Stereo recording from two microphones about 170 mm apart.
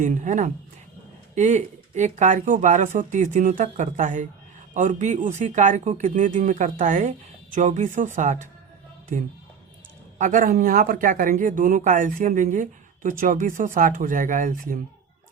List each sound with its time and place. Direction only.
0.0 s speech: 45° right (ahead or behind)
10.2 s speech: 50° right (ahead or behind)